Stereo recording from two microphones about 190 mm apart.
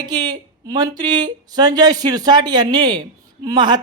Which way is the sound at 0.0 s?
25° right (ahead or behind).